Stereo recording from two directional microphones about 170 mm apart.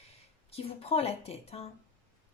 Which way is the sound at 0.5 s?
35° left (ahead or behind).